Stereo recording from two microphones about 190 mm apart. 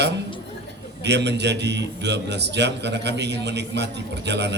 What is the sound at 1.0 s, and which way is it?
A man's voice, 65° right (ahead or behind).